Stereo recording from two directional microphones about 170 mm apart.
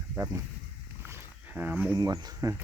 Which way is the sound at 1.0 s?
15° right (ahead or behind).